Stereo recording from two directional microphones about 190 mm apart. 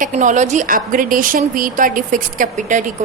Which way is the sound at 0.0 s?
40° right (ahead or behind).